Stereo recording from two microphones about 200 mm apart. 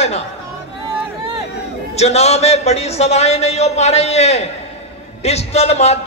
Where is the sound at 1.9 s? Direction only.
35° left (ahead or behind).